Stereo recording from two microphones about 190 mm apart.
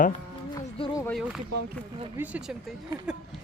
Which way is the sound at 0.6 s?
25° left (ahead or behind).